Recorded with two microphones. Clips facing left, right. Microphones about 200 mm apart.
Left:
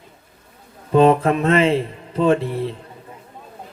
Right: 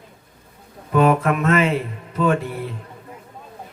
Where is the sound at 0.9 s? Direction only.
30° left (ahead or behind).